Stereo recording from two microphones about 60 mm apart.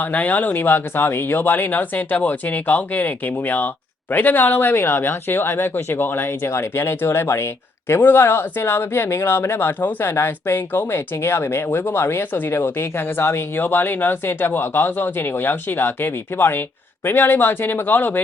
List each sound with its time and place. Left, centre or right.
0.0 s speech: left